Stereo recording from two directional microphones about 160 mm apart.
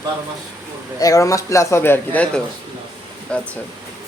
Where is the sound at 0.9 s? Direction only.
20° left (ahead or behind).